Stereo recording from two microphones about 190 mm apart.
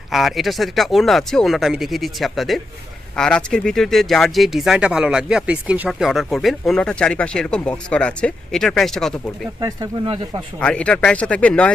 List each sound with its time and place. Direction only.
0.1 s speech: centre (ahead or behind)
9.6 s speech: 20° right (ahead or behind)
10.6 s speech: 5° left (ahead or behind)